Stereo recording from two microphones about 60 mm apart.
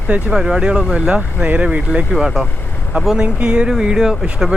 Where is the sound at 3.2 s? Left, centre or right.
Centre.